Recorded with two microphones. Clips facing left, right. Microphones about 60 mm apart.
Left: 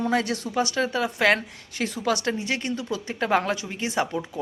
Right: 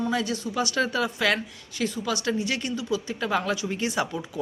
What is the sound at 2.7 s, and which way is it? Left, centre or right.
A woman's voice, left.